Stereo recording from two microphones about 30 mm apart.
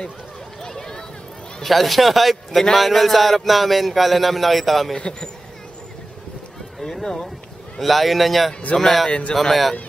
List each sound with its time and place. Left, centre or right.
0.6 s a sound: centre
1.6 s speech: centre
4.9 s a man's voice: left
6.8 s speech: centre
8.7 s a man's voice: left
9.3 s speech: centre